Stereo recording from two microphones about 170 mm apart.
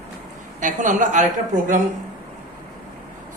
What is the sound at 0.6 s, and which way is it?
Speech, 50° right (ahead or behind).